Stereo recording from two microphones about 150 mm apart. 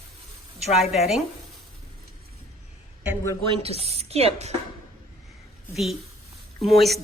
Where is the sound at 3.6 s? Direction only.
45° right (ahead or behind).